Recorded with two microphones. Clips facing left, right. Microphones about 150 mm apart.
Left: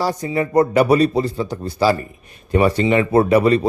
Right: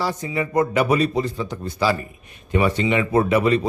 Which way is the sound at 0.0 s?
40° left (ahead or behind).